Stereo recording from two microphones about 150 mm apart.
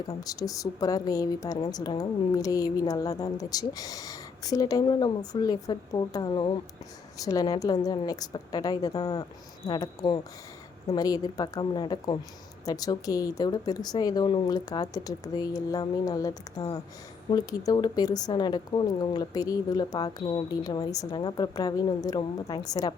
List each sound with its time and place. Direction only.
0.0 s speech: 25° left (ahead or behind)